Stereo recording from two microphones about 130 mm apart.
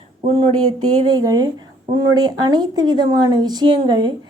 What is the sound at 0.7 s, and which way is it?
A woman's voice, 30° right (ahead or behind).